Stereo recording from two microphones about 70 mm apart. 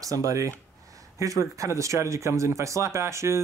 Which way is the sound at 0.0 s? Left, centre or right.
Right.